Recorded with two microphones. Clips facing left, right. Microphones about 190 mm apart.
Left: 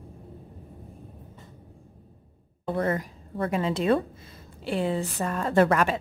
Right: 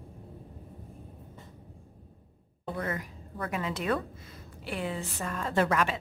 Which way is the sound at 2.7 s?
35° left (ahead or behind).